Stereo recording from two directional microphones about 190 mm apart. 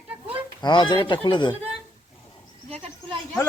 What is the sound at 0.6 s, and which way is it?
Speech, 25° left (ahead or behind).